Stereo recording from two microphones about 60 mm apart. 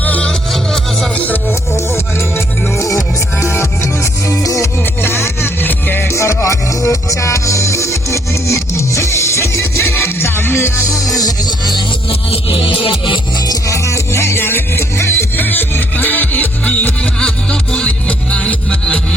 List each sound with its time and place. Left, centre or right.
0.0 s music: left
2.7 s music: left
4.3 s music: left
5.0 s music: left
6.1 s music: left
9.9 s music: left
13.5 s music: left
15.4 s music: left
17.2 s music: centre